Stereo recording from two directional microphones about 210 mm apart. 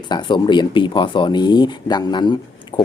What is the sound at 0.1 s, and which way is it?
Speech, 20° left (ahead or behind).